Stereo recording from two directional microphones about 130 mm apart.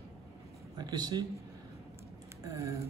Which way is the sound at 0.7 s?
35° right (ahead or behind).